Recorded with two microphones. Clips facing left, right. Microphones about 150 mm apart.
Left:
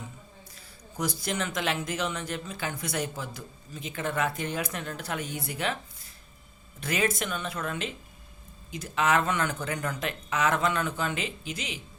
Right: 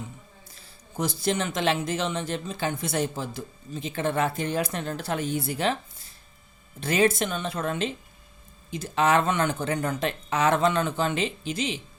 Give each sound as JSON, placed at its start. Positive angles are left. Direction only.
{"t": 0.9, "sound": "speech", "side_deg": -25}
{"t": 6.7, "sound": "speech", "side_deg": -30}